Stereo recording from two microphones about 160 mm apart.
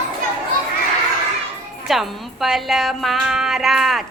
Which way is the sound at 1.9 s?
Centre (ahead or behind).